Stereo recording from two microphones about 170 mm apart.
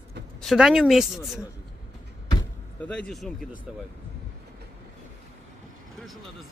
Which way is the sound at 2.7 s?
5° left (ahead or behind).